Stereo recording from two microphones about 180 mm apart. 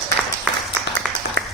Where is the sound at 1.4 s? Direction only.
70° right (ahead or behind).